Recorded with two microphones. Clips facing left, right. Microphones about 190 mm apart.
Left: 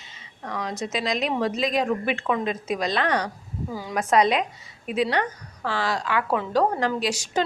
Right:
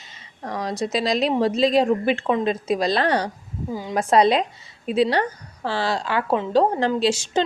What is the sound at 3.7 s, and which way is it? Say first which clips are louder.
A woman's voice: right 3 dB; 20° right (ahead or behind).